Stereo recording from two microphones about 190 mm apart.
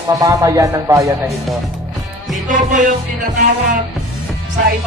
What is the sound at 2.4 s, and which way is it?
Music, 40° right (ahead or behind).